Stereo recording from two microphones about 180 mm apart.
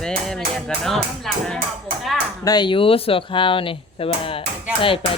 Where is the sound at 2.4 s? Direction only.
25° left (ahead or behind).